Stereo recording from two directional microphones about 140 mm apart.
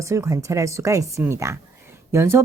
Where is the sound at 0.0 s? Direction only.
20° right (ahead or behind).